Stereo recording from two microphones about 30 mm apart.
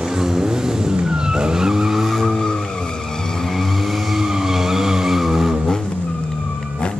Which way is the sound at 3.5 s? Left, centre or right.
Centre.